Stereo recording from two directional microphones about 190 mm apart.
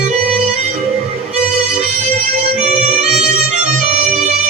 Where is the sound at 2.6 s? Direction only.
35° right (ahead or behind).